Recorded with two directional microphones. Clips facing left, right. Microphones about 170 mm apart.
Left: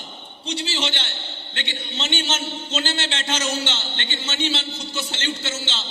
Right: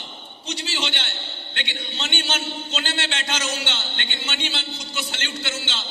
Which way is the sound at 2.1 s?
25° left (ahead or behind).